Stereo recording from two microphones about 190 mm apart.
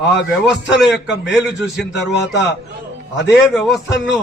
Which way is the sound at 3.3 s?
Centre (ahead or behind).